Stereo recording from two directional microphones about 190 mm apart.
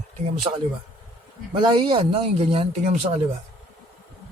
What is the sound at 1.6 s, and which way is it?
Speech, 25° right (ahead or behind).